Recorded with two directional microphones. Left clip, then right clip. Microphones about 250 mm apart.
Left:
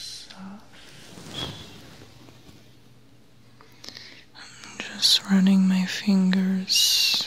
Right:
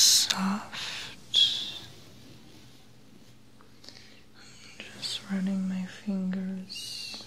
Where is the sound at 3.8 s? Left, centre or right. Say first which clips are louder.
Left 9 dB; left.